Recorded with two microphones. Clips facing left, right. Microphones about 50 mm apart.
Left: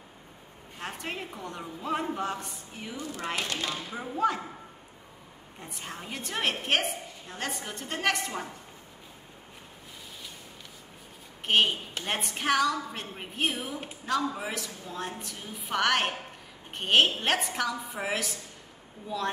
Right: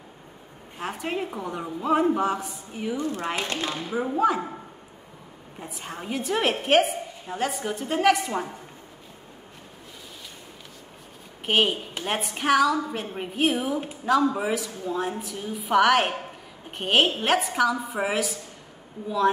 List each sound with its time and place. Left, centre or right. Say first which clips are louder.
0.7 s a woman's voice: right 7 dB; centre
3.0 s speech: right 2 dB; right
3.9 s speech: right 6 dB; centre
5.6 s a woman's voice: right 4 dB; centre
11.4 s a woman's voice: right 2 dB; centre